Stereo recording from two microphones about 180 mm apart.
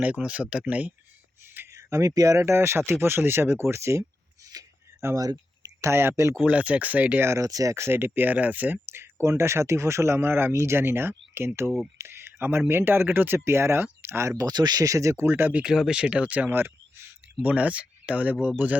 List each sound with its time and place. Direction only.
0.0 s speech: 5° right (ahead or behind)
4.5 s a sound: 15° right (ahead or behind)
6.4 s speech: 5° right (ahead or behind)